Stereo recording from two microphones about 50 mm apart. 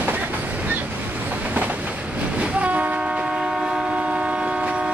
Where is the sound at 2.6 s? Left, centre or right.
Right.